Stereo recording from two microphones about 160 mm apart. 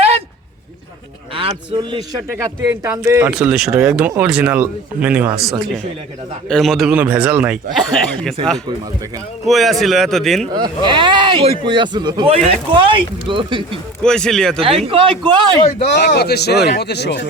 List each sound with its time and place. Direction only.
1.3 s speech: 35° right (ahead or behind)
2.3 s a man's voice: 20° right (ahead or behind)
3.3 s a man's voice: 5° right (ahead or behind)
6.5 s a man's voice: centre (ahead or behind)
8.1 s a man's voice: 5° left (ahead or behind)
9.5 s a man's voice: centre (ahead or behind)
10.8 s speech: 30° right (ahead or behind)
14.0 s a man's voice: 5° left (ahead or behind)
14.6 s speech: 35° right (ahead or behind)
16.0 s speech: 90° left